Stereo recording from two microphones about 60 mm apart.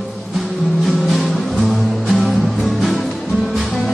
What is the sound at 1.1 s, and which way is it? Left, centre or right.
Music, centre.